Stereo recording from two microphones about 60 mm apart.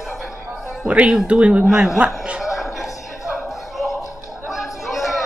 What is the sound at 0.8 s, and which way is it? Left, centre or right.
A woman's voice, right.